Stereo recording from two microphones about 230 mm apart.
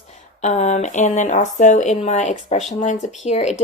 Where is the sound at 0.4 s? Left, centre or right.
Left.